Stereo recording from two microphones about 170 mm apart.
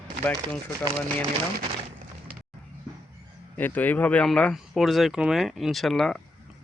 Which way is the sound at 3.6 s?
10° left (ahead or behind).